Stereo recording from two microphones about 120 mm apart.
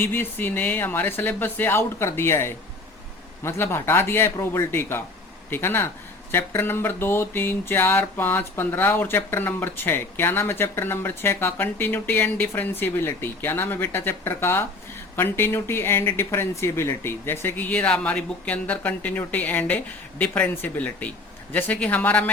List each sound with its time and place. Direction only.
0.0 s speech: 15° left (ahead or behind)